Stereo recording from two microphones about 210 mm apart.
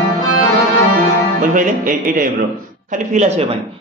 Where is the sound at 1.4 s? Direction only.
40° right (ahead or behind).